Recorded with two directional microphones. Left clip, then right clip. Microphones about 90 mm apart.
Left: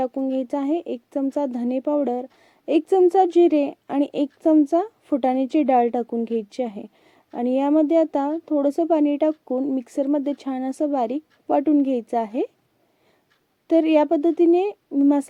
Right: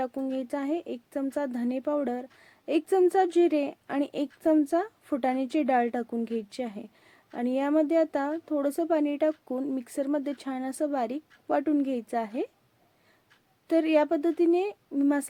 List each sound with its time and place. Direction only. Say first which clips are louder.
0.0 s speech: left 7 dB; 25° left (ahead or behind)
0.3 s a woman's voice: left 7 dB; 35° left (ahead or behind)
9.5 s speech: left 8 dB; 20° left (ahead or behind)
9.7 s a woman's voice: left 7 dB; 35° left (ahead or behind)
13.7 s a woman's voice: left 6 dB; 35° left (ahead or behind)